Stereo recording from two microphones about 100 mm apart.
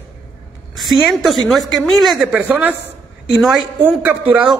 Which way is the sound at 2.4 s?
15° right (ahead or behind).